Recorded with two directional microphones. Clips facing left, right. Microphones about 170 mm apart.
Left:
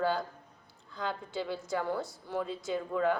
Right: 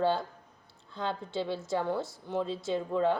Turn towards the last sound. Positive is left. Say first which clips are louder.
# right 2 dB
turn(degrees=-25)  # may be behind; listen again after turning